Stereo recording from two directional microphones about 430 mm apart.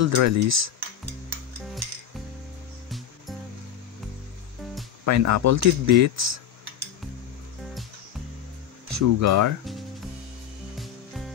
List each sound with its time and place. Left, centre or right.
0.0 s speech: right
5.0 s speech: right
8.8 s speech: right
10.8 s music: centre